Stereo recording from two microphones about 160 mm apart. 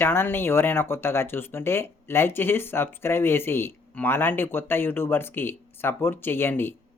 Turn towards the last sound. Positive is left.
turn(degrees=15)  # may be behind; listen again after turning